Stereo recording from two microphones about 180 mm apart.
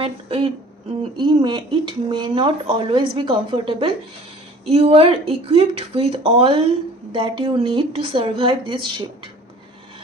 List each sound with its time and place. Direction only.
0.0 s a woman's voice: 30° right (ahead or behind)